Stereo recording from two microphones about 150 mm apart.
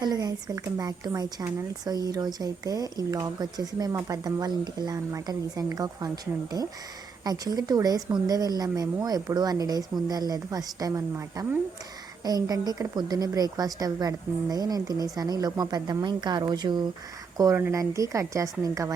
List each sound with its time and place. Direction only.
0.0 s speech: 25° right (ahead or behind)